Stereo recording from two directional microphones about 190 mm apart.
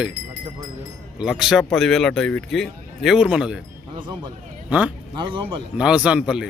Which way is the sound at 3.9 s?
25° right (ahead or behind).